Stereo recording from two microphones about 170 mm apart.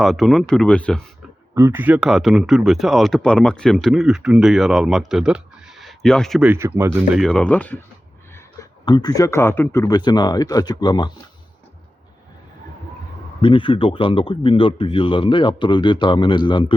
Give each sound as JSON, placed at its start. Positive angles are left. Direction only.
{"t": 0.0, "sound": "speech", "side_deg": 0}
{"t": 1.5, "sound": "speech", "side_deg": -15}
{"t": 6.4, "sound": "speech", "side_deg": -15}
{"t": 7.2, "sound": "speech", "side_deg": 5}
{"t": 8.8, "sound": "speech", "side_deg": 25}
{"t": 13.4, "sound": "speech", "side_deg": 30}